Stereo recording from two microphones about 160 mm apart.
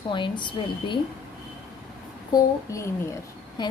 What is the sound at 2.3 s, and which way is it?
Speech, 20° left (ahead or behind).